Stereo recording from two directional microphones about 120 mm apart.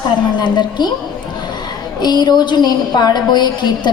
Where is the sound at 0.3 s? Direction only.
40° left (ahead or behind).